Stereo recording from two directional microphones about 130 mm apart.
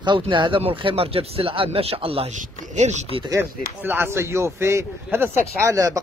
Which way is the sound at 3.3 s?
15° right (ahead or behind).